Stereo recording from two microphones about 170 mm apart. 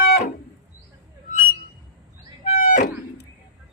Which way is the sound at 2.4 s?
45° left (ahead or behind).